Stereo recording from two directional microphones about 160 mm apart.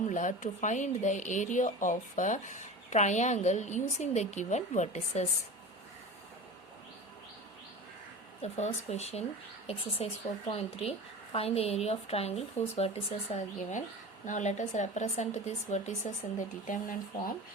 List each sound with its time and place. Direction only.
0.1 s speech: 50° left (ahead or behind)
8.4 s a woman's voice: 45° left (ahead or behind)
16.6 s speech: 60° left (ahead or behind)